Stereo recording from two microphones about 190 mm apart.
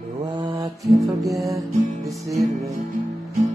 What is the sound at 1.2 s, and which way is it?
Music, 15° right (ahead or behind).